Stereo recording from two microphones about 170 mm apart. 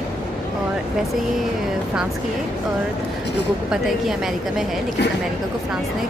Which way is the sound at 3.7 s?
Centre (ahead or behind).